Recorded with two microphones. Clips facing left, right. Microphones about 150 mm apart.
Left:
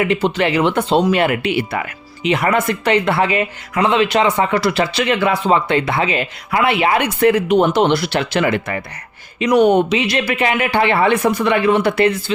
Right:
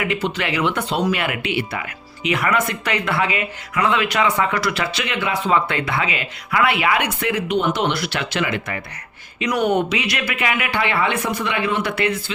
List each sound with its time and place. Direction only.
0.0 s speech: 30° left (ahead or behind)
2.2 s speech: 30° left (ahead or behind)
9.4 s speech: 25° left (ahead or behind)